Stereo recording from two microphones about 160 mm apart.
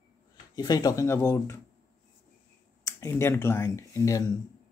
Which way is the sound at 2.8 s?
15° left (ahead or behind).